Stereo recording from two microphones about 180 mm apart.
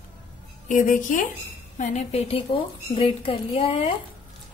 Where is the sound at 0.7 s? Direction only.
45° left (ahead or behind).